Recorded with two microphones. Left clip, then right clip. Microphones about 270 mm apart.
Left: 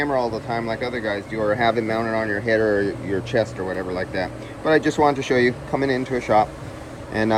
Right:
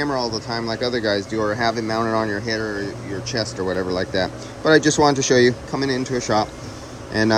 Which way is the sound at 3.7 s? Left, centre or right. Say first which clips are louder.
Right 3 dB; centre.